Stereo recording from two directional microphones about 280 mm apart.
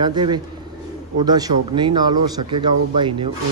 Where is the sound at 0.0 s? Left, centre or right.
Centre.